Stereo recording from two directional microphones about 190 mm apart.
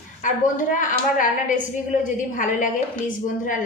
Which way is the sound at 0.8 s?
45° left (ahead or behind).